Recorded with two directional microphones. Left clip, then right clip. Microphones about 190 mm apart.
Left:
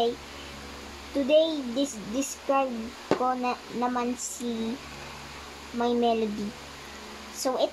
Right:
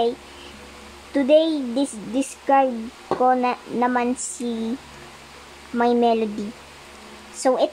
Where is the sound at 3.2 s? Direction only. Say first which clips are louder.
Right 13 dB; 50° right (ahead or behind).